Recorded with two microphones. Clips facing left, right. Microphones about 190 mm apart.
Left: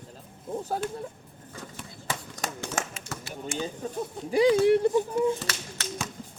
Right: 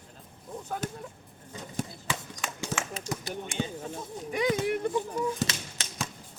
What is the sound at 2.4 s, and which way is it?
Clip-clop, 40° left (ahead or behind).